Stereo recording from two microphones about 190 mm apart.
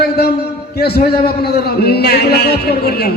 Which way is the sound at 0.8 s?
60° left (ahead or behind).